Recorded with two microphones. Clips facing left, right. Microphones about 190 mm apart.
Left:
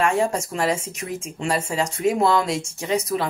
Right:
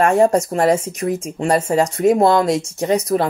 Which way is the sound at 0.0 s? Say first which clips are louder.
Right 7 dB; 40° right (ahead or behind).